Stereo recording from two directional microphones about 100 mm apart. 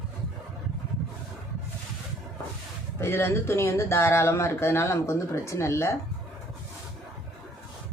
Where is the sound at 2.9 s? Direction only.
25° left (ahead or behind).